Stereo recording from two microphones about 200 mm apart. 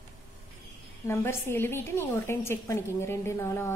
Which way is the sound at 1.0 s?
10° left (ahead or behind).